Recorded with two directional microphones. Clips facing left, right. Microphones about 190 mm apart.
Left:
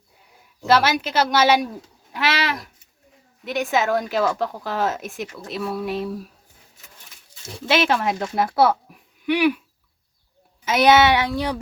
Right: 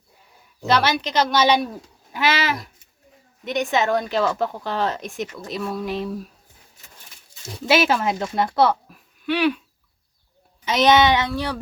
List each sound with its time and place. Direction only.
0.6 s speech: 5° left (ahead or behind)
7.7 s speech: 5° right (ahead or behind)
8.9 s a sound: 15° left (ahead or behind)
10.7 s speech: 10° left (ahead or behind)